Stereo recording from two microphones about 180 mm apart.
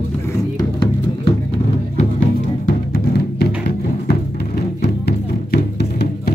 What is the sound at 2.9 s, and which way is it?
Music, 60° left (ahead or behind).